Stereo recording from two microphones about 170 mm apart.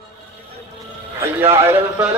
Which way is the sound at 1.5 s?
15° right (ahead or behind).